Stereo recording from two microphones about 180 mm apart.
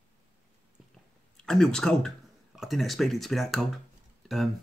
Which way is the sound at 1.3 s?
5° left (ahead or behind).